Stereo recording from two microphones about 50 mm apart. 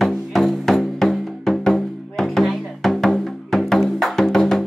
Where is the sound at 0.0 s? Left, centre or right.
Centre.